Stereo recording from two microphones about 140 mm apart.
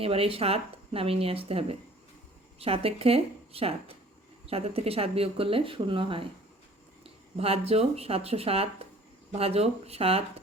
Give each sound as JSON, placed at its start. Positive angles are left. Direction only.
{"t": 0.0, "sound": "speech", "side_deg": -40}